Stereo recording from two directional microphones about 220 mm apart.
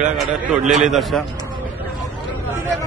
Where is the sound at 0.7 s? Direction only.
Centre (ahead or behind).